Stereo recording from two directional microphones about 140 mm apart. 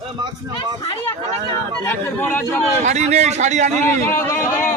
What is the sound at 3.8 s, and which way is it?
Speech, 15° left (ahead or behind).